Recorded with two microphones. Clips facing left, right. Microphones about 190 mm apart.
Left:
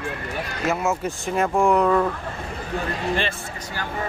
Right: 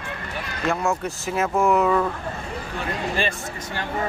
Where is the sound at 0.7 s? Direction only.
Centre (ahead or behind).